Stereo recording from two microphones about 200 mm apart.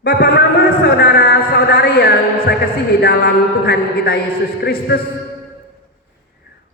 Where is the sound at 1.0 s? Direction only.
50° left (ahead or behind).